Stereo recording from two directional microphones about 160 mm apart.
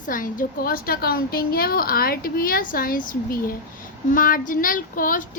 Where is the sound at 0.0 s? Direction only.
55° left (ahead or behind).